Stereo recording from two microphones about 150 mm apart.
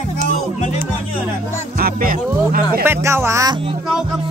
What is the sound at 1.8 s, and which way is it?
Music, 75° right (ahead or behind).